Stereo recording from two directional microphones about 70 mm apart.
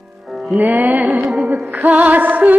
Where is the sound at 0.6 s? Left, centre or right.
Right.